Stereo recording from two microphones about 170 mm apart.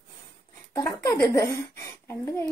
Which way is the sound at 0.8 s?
20° left (ahead or behind).